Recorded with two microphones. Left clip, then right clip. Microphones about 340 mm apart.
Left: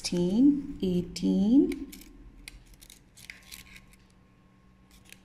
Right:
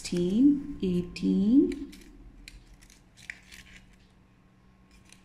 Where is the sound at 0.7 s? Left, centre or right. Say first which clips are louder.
Left 1 dB; centre.